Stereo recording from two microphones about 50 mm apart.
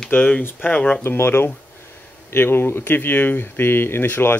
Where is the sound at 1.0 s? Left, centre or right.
Left.